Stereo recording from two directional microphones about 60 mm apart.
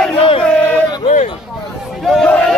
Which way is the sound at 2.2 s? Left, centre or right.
Centre.